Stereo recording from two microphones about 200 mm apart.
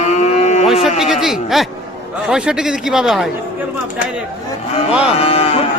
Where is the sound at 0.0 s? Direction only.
35° left (ahead or behind).